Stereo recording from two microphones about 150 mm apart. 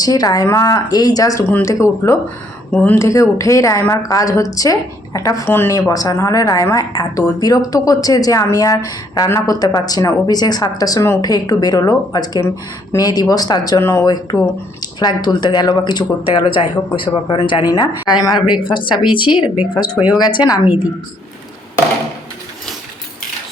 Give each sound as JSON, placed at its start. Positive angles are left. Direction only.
{"t": 0.0, "sound": "a woman's voice", "side_deg": 25}